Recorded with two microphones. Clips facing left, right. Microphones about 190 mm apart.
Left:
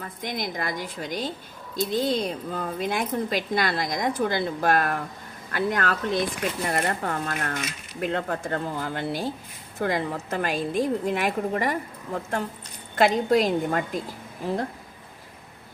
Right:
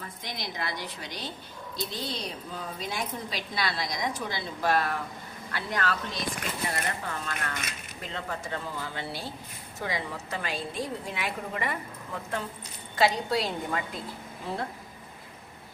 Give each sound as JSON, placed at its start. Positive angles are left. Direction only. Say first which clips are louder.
{"t": 0.2, "sound": "a woman's voice", "louder": "left 7 dB", "side_deg": 50}